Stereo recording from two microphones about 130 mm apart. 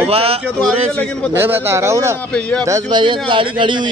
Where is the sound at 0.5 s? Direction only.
5° left (ahead or behind).